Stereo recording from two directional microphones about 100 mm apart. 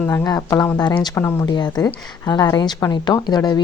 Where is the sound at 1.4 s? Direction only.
45° left (ahead or behind).